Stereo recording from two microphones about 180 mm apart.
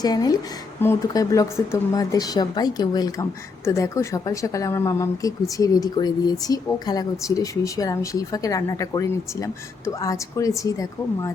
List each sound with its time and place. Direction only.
0.0 s speech: 20° left (ahead or behind)